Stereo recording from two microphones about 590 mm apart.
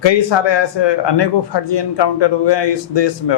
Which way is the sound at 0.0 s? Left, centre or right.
Left.